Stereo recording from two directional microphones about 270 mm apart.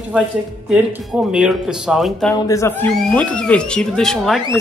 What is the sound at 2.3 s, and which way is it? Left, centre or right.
Speech, centre.